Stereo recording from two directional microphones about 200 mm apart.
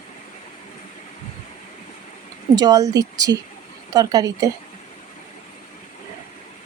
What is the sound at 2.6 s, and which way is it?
Speech, 20° right (ahead or behind).